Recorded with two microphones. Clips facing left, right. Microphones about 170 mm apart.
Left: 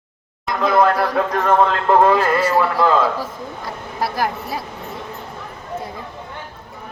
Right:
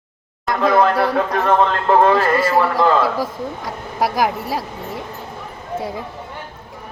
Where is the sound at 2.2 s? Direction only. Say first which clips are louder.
Right 1 dB; 10° right (ahead or behind).